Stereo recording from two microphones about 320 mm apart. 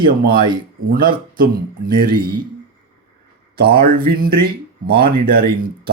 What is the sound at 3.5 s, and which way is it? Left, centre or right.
Speech, right.